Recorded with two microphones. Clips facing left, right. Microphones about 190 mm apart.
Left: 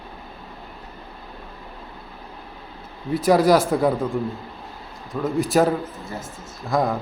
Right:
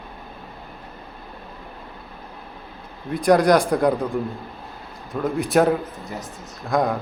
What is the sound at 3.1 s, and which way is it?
Speech, 5° left (ahead or behind).